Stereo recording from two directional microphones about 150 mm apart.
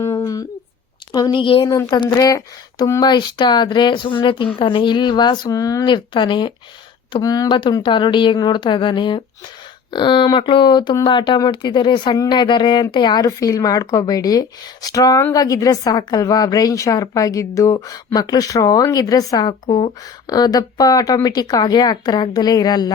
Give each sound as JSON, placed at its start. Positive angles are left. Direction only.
{"t": 0.0, "sound": "humming", "side_deg": 20}
{"t": 1.1, "sound": "speech", "side_deg": 30}
{"t": 1.7, "sound": "speech", "side_deg": 25}